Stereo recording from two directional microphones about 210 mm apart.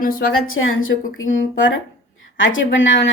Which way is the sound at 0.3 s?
75° left (ahead or behind).